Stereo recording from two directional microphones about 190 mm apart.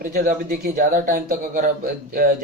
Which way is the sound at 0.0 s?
45° right (ahead or behind).